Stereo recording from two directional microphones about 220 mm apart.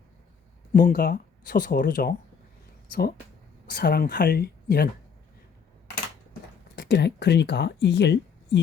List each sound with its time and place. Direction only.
0.7 s speech: 40° left (ahead or behind)
3.7 s speech: 45° left (ahead or behind)
6.7 s speech: 45° left (ahead or behind)